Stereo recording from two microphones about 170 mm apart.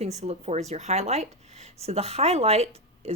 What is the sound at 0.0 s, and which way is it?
Speech, 40° right (ahead or behind).